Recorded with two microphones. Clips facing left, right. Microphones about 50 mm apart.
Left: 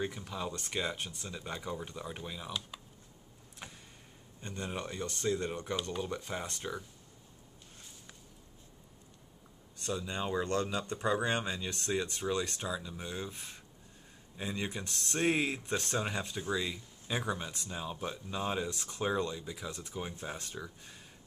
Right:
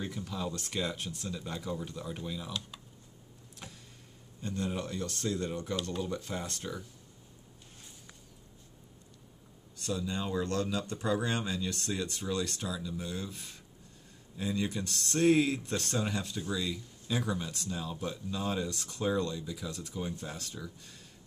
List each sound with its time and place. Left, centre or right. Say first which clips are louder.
0.0 s speech: even; centre
3.6 s a sound: even; centre
4.4 s speech: right 4 dB; centre
9.8 s speech: right 1 dB; centre